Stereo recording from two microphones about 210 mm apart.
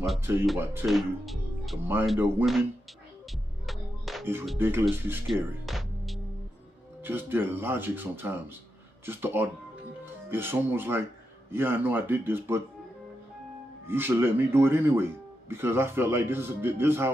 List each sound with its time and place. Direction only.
0.2 s speech: 10° right (ahead or behind)
3.6 s music: centre (ahead or behind)
4.6 s speech: 10° right (ahead or behind)
13.8 s speech: 10° right (ahead or behind)